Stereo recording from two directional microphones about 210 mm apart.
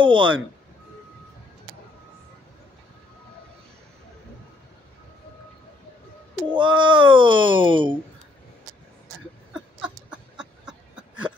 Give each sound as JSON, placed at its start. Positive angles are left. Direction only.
{"t": 0.0, "sound": "speech", "side_deg": -25}
{"t": 6.5, "sound": "speech", "side_deg": -20}
{"t": 9.5, "sound": "a sound", "side_deg": -5}